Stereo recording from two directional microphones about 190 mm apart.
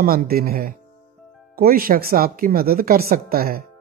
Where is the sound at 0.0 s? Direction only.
50° right (ahead or behind).